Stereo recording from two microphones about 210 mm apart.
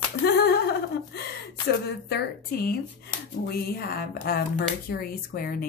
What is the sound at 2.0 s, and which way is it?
Speech, 50° left (ahead or behind).